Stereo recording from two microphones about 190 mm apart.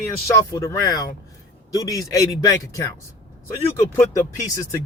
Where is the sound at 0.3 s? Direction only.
15° left (ahead or behind).